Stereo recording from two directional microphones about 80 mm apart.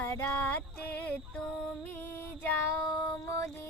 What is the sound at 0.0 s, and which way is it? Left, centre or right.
Music, left.